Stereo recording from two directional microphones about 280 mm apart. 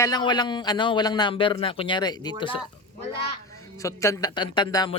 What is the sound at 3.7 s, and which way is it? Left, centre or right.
Speech, centre.